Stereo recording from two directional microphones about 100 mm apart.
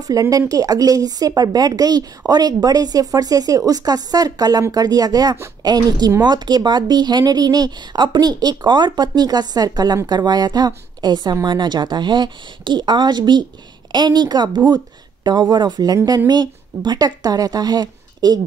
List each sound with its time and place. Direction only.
0.0 s a woman's voice: 40° right (ahead or behind)